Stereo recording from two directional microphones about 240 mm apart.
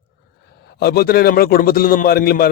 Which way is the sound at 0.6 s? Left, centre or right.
Left.